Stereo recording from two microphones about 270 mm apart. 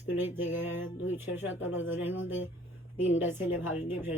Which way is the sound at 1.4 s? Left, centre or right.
Left.